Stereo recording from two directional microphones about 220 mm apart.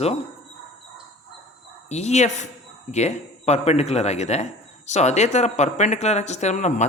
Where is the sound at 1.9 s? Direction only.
30° left (ahead or behind).